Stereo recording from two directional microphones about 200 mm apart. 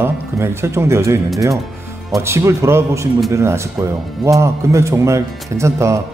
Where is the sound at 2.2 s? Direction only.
15° right (ahead or behind).